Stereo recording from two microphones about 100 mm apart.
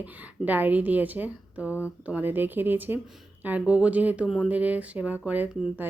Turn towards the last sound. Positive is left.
turn(degrees=-15)  # may be behind; listen again after turning